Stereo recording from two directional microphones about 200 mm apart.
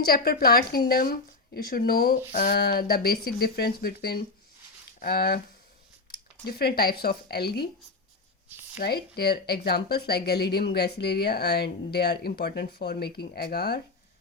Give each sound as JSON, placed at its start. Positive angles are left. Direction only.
{"t": 0.0, "sound": "speech", "side_deg": 50}
{"t": 8.8, "sound": "speech", "side_deg": 50}